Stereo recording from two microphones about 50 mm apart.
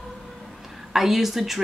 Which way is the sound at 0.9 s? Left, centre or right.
Centre.